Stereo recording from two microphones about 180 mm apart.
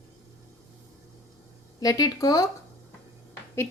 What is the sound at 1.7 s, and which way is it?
Speech, 20° left (ahead or behind).